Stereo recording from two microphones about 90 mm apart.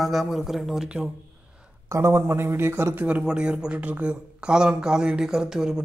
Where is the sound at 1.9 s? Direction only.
30° right (ahead or behind).